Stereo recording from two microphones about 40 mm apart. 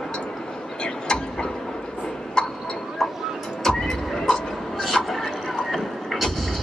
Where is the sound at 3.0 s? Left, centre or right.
Centre.